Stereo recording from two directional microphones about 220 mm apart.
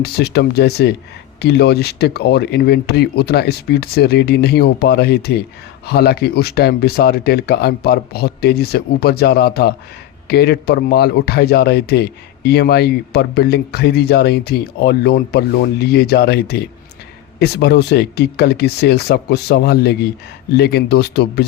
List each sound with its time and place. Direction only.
0.0 s speech: 45° left (ahead or behind)